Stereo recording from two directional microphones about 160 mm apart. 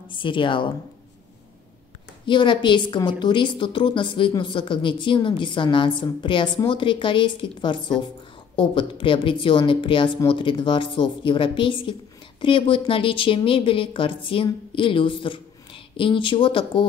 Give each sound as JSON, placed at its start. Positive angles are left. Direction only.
{"t": 0.1, "sound": "a woman's voice", "side_deg": 30}
{"t": 2.2, "sound": "a woman's voice", "side_deg": 30}